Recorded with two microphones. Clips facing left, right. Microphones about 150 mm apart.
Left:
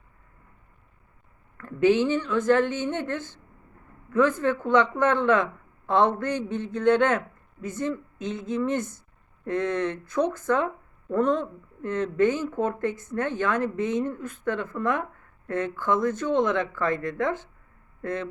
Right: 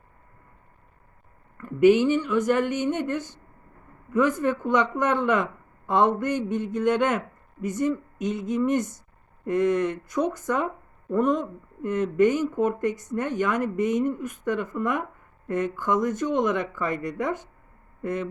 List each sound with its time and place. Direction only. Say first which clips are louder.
1.6 s speech: right 3 dB; 15° right (ahead or behind)